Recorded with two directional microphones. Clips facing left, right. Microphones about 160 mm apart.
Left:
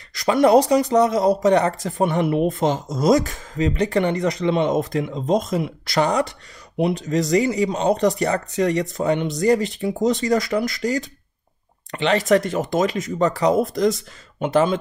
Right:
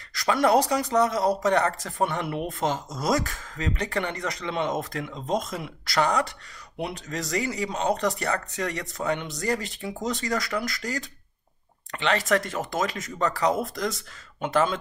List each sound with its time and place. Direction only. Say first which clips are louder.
0.1 s speech: left 6 dB; 20° left (ahead or behind)